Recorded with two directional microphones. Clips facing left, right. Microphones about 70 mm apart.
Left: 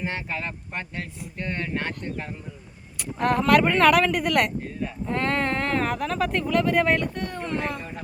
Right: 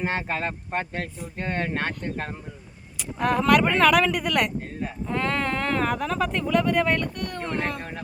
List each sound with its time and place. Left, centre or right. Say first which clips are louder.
0.0 s speech: right 3 dB; right
3.0 s speech: even; centre
7.8 s speech: right 1 dB; right